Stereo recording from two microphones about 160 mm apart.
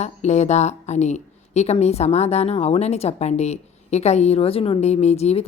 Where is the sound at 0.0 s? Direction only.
45° left (ahead or behind).